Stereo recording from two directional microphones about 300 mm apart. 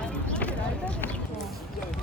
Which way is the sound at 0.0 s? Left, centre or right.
Centre.